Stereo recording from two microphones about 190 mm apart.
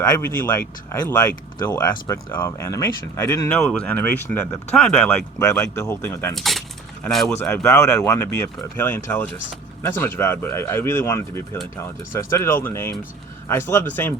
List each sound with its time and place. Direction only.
0.0 s speech: 20° left (ahead or behind)
3.6 s speech: 5° left (ahead or behind)
6.3 s speech: centre (ahead or behind)
7.3 s speech: 10° left (ahead or behind)